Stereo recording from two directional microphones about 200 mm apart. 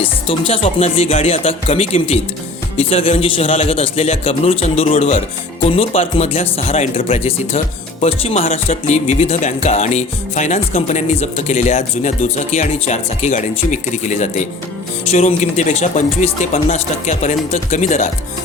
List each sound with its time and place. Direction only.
0.0 s a man's voice: 30° left (ahead or behind)